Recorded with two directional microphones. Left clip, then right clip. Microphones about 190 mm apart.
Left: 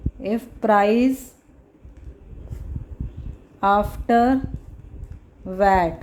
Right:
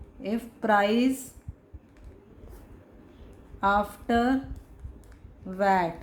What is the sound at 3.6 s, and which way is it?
Speech, 30° left (ahead or behind).